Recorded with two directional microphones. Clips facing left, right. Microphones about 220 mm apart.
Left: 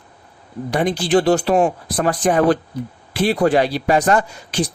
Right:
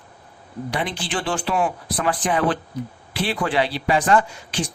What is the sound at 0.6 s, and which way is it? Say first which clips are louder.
A man's voice: left 9 dB; 45° left (ahead or behind).